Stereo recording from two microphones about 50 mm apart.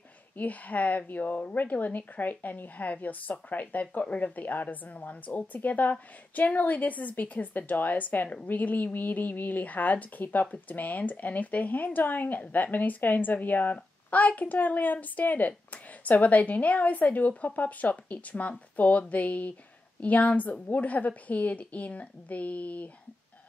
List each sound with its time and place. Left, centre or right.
0.4 s a woman's voice: left